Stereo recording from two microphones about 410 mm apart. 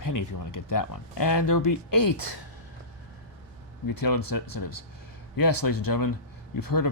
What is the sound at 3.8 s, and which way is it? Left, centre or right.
Speech, left.